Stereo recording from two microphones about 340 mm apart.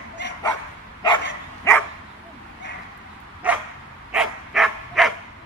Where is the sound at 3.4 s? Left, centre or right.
Centre.